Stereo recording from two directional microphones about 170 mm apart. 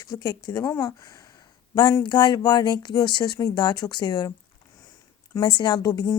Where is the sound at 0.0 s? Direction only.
20° left (ahead or behind).